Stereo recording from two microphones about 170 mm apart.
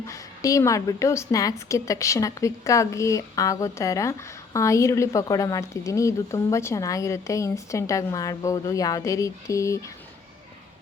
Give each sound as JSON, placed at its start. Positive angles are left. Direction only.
{"t": 0.1, "sound": "a woman's voice", "side_deg": 20}